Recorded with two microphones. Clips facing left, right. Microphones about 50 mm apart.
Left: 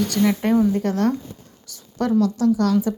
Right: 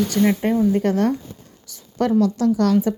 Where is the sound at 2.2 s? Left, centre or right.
Right.